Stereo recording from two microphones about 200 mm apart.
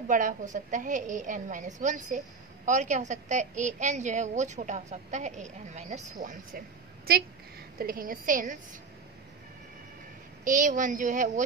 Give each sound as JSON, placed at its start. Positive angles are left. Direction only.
{"t": 0.1, "sound": "a woman's voice", "side_deg": -40}
{"t": 7.1, "sound": "a woman's voice", "side_deg": -50}
{"t": 10.4, "sound": "a woman's voice", "side_deg": -40}